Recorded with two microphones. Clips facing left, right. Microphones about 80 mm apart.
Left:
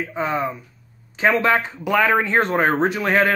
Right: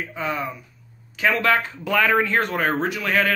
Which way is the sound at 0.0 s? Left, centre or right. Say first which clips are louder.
Left 4 dB; left.